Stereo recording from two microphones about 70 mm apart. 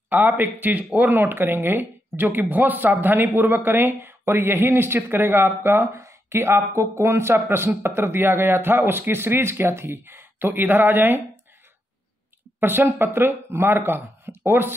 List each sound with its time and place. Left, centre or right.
0.1 s speech: right
6.0 s a sound: right
6.7 s speech: right
12.5 s speech: right